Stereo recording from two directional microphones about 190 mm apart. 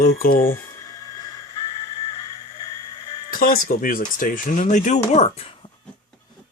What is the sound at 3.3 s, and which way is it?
Speech, 50° left (ahead or behind).